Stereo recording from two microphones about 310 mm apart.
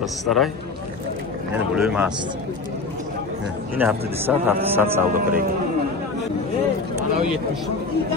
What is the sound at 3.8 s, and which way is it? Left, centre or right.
A man's voice, centre.